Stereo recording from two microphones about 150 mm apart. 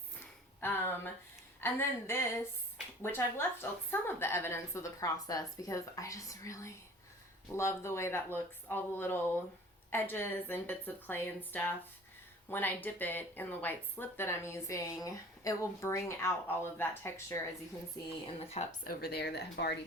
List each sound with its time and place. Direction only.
0.6 s a sound: 15° left (ahead or behind)
1.6 s a woman's voice: 15° left (ahead or behind)
18.3 s speech: 40° left (ahead or behind)
18.9 s speech: 90° left